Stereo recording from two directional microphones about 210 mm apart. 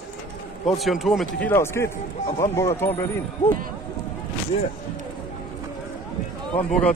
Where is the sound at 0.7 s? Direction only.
Centre (ahead or behind).